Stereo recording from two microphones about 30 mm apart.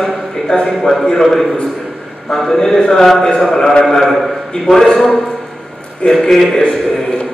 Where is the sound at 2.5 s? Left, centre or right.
Centre.